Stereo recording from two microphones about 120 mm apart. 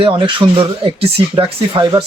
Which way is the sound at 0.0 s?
45° right (ahead or behind).